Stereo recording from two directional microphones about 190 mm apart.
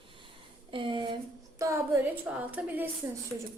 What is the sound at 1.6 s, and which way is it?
A woman's voice, 15° right (ahead or behind).